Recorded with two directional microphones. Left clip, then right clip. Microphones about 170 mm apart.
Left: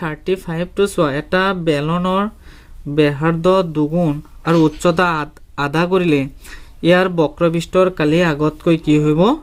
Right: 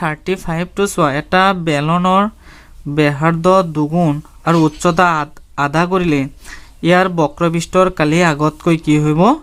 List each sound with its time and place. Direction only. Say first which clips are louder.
0.0 s speech: right 2 dB; 30° right (ahead or behind)